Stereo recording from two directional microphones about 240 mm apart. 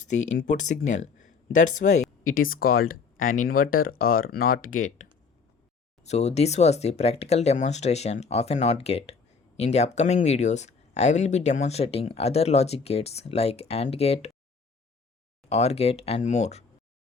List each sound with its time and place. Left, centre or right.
0.3 s speech: left
15.4 s speech: left